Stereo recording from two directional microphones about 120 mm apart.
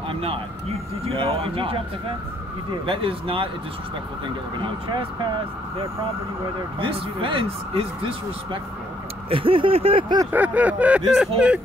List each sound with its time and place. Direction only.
0.1 s speech: 50° right (ahead or behind)
4.6 s speech: 40° right (ahead or behind)
6.8 s speech: 45° right (ahead or behind)
9.3 s speech: 50° right (ahead or behind)
10.3 s speech: 15° right (ahead or behind)